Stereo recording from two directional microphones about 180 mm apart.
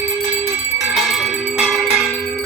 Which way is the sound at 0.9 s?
Centre (ahead or behind).